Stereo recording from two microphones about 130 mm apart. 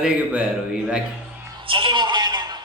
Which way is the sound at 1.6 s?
40° right (ahead or behind).